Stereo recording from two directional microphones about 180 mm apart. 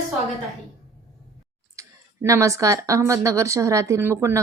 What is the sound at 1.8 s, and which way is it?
Speech, 15° right (ahead or behind).